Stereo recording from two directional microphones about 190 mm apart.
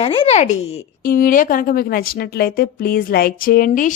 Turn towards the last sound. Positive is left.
turn(degrees=45)  # may be behind; listen again after turning